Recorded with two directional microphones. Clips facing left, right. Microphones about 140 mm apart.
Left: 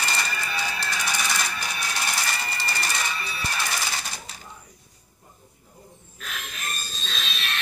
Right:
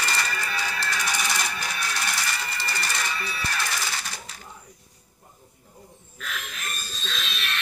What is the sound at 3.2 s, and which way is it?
Music, 20° left (ahead or behind).